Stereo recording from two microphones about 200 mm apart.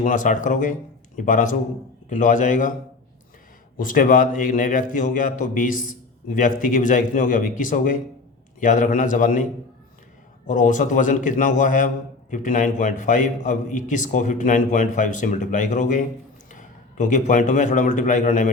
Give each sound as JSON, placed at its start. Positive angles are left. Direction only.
{"t": 0.0, "sound": "a man's voice", "side_deg": 40}
{"t": 3.8, "sound": "a man's voice", "side_deg": 45}